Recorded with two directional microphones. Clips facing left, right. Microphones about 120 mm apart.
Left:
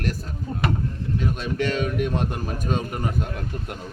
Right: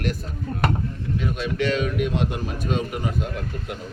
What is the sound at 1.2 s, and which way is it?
Speech, 40° left (ahead or behind).